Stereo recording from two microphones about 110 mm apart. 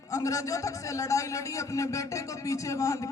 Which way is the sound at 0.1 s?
30° left (ahead or behind).